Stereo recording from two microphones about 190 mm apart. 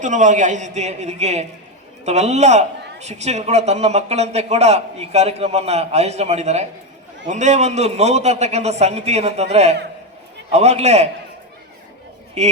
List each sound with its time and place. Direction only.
0.0 s a man's voice: 40° right (ahead or behind)
12.4 s a man's voice: 35° right (ahead or behind)